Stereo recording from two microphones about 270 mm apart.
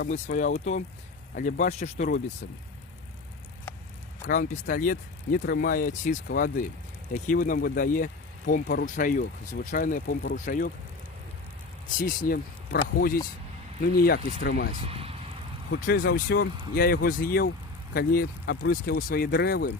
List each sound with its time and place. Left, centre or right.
0.0 s speech: left
4.3 s speech: left
11.9 s speech: left
14.8 s speech: right
15.7 s speech: left